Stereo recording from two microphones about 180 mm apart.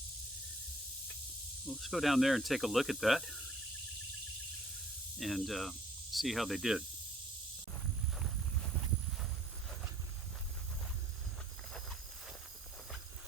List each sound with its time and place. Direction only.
1.6 s speech: centre (ahead or behind)
5.2 s speech: centre (ahead or behind)